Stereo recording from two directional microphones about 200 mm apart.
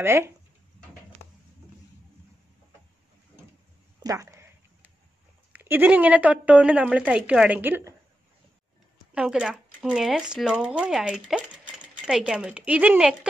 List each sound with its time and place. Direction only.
0.0 s speech: 10° right (ahead or behind)
4.0 s a sound: 15° right (ahead or behind)
5.5 s speech: 10° right (ahead or behind)
9.1 s speech: 5° right (ahead or behind)